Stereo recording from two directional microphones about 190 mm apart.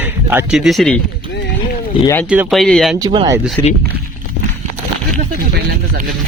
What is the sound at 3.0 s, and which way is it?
Speech, 25° right (ahead or behind).